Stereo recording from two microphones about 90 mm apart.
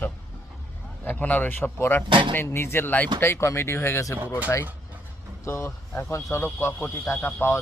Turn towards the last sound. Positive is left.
turn(degrees=25)  # may be behind; listen again after turning